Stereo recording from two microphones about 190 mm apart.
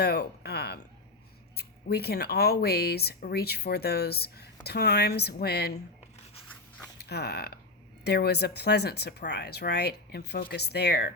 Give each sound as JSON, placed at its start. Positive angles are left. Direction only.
{"t": 0.0, "sound": "a sound", "side_deg": 55}
{"t": 1.5, "sound": "speech", "side_deg": 55}
{"t": 7.0, "sound": "speech", "side_deg": 60}